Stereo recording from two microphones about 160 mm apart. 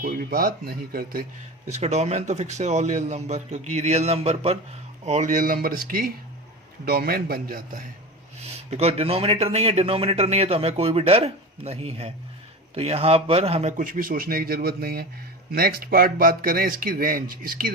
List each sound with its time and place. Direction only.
0.0 s speech: 70° right (ahead or behind)
1.7 s a man's voice: 45° right (ahead or behind); by 7.8 s 65° right (ahead or behind)
8.4 s a man's voice: 40° right (ahead or behind); by 17.7 s 65° right (ahead or behind)